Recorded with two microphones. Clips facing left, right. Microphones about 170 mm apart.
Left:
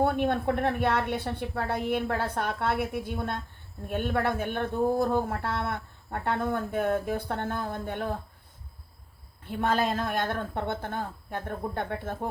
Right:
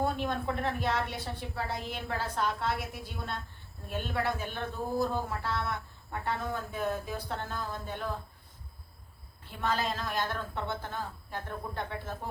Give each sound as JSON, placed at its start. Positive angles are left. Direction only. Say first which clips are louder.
{"t": 0.0, "sound": "speech", "louder": "left 6 dB", "side_deg": 60}
{"t": 9.5, "sound": "speech", "louder": "left 6 dB", "side_deg": 55}